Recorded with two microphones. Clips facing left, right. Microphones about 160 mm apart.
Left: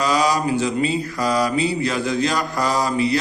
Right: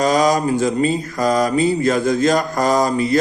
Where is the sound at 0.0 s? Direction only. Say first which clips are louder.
Right 4 dB; 45° right (ahead or behind).